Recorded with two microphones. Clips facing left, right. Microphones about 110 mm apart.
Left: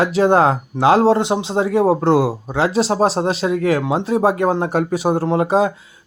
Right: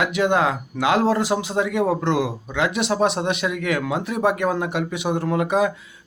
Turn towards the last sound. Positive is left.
turn(degrees=30)  # may be behind; listen again after turning